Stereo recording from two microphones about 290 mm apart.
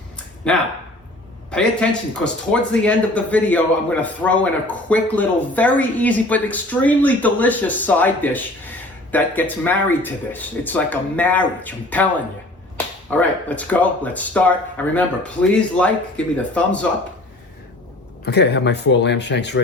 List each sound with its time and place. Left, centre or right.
0.4 s a man's voice: centre
18.3 s speech: left